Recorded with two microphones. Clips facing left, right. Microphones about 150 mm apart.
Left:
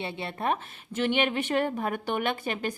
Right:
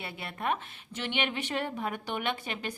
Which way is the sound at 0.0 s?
25° left (ahead or behind).